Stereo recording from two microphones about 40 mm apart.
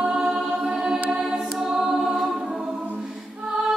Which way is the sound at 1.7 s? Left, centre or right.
Centre.